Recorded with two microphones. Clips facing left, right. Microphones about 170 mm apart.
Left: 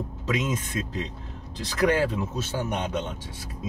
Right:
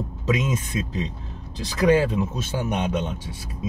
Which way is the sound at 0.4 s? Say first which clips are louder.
Right 2 dB; 15° right (ahead or behind).